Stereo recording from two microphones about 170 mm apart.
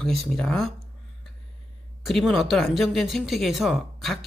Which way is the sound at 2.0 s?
Centre (ahead or behind).